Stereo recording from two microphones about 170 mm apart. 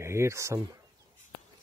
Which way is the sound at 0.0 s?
15° right (ahead or behind).